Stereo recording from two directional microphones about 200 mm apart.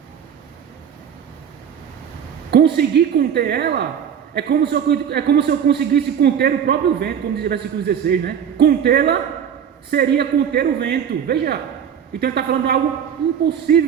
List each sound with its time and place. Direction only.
2.5 s a man's voice: 55° right (ahead or behind)